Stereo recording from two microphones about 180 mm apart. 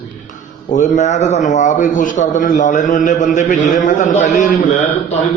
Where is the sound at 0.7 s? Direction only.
45° left (ahead or behind).